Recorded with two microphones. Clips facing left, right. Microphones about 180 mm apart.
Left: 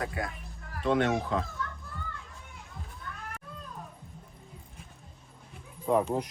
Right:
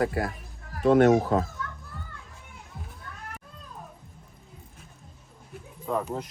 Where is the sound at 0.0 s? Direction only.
60° right (ahead or behind).